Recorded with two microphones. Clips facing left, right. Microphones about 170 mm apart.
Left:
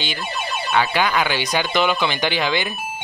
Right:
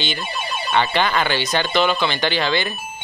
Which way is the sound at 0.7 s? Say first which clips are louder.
Even; 5° left (ahead or behind).